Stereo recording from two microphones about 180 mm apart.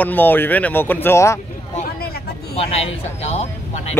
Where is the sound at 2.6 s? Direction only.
35° left (ahead or behind).